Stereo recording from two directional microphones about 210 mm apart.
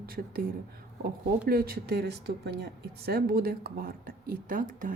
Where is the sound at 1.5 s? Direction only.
45° right (ahead or behind).